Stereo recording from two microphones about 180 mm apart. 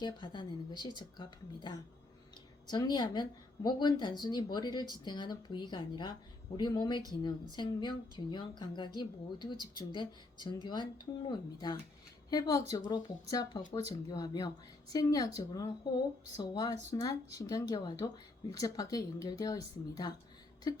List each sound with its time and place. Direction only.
0.0 s speech: 25° left (ahead or behind)